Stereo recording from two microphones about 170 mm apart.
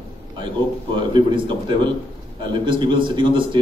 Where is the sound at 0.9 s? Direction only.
25° right (ahead or behind).